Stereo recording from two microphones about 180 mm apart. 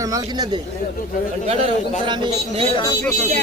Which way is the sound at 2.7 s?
20° left (ahead or behind).